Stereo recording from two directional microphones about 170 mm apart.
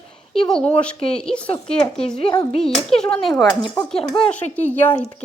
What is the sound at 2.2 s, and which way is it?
Speech, 30° left (ahead or behind).